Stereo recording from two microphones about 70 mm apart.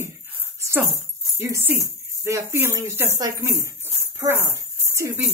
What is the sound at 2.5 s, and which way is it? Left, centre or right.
Speech, right.